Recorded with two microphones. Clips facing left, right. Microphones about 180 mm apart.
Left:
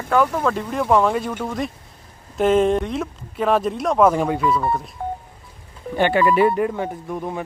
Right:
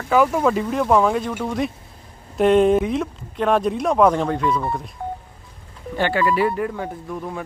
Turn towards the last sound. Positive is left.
turn(degrees=25)  # may be behind; listen again after turning